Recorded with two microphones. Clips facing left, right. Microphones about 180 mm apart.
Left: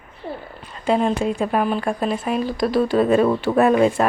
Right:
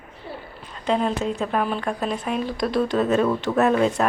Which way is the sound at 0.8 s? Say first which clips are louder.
Left 3 dB; 10° left (ahead or behind).